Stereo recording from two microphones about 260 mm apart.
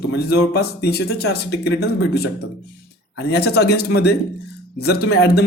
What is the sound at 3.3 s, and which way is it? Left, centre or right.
Speech, left.